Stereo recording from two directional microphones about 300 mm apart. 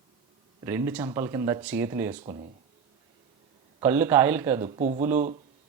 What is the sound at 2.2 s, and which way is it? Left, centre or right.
Speech, right.